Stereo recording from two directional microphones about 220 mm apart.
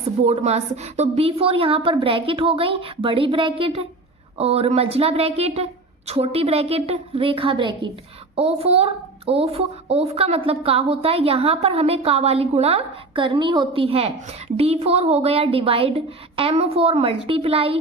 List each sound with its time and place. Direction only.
0.3 s a woman's voice: 30° right (ahead or behind)